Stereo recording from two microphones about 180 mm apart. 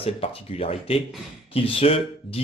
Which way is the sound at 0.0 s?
30° left (ahead or behind).